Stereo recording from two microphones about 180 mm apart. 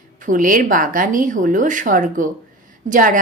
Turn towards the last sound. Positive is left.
turn(degrees=-45)  # may be behind; listen again after turning